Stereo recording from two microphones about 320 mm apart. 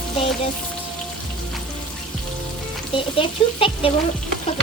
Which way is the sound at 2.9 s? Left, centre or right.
Centre.